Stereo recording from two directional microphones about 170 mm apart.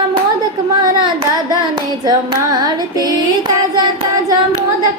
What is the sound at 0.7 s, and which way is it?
Child singing, 25° right (ahead or behind).